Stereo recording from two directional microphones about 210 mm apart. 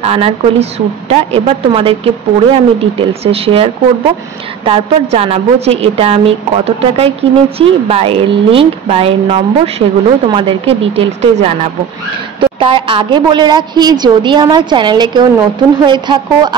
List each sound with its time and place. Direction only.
0.0 s a woman's voice: 30° right (ahead or behind)